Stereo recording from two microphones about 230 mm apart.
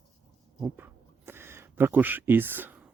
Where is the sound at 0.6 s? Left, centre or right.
Centre.